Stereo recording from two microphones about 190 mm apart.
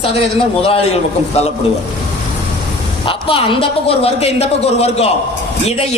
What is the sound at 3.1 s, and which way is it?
A woman's voice, 30° left (ahead or behind).